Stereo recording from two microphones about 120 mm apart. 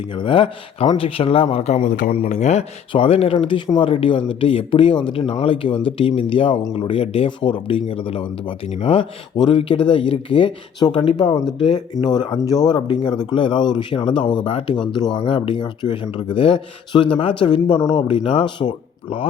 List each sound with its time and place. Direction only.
0.1 s speech: 45° left (ahead or behind); by 2.6 s 70° left (ahead or behind)
2.9 s speech: 55° left (ahead or behind)